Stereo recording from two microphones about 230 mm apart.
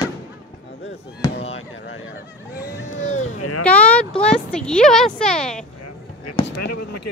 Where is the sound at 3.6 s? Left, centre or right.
Centre.